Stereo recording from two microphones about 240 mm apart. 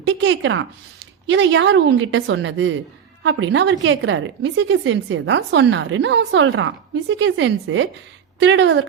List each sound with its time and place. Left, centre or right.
0.1 s a woman's voice: right